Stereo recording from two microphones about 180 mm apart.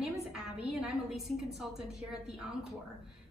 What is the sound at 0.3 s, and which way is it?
A woman's voice, 5° right (ahead or behind).